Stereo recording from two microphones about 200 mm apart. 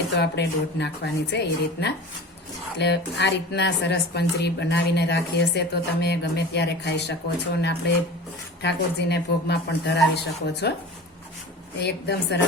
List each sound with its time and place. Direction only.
0.2 s a woman's voice: 60° left (ahead or behind)
11.8 s a woman's voice: 60° left (ahead or behind)